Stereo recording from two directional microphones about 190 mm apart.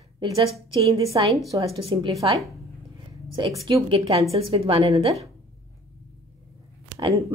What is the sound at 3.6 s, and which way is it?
A woman's voice, 25° right (ahead or behind).